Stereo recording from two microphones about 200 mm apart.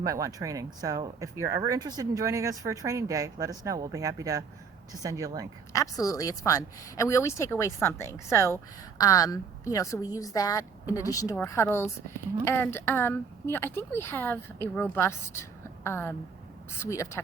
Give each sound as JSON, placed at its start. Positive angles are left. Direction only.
{"t": 0.0, "sound": "speech", "side_deg": -15}
{"t": 5.7, "sound": "a woman's voice", "side_deg": 15}